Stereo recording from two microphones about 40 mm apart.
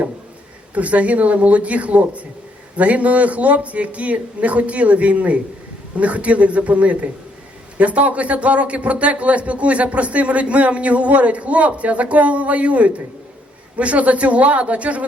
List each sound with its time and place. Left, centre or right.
0.7 s a man's voice: right